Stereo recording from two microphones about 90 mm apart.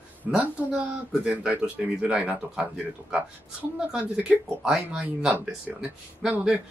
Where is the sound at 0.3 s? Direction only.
10° right (ahead or behind).